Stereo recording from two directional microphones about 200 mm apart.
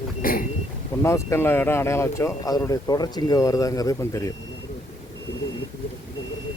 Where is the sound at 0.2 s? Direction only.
45° left (ahead or behind).